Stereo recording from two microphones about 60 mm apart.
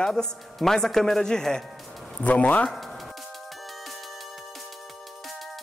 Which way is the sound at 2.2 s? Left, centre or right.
Left.